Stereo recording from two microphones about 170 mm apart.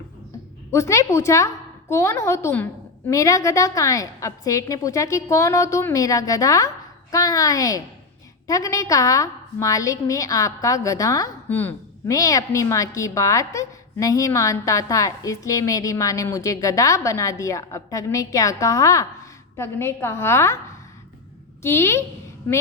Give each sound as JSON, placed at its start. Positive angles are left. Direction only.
{"t": 0.7, "sound": "a woman's voice", "side_deg": 15}
{"t": 21.6, "sound": "a woman's voice", "side_deg": 15}